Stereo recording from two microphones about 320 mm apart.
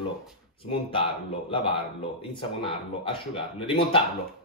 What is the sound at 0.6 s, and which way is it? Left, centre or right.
Speech, centre.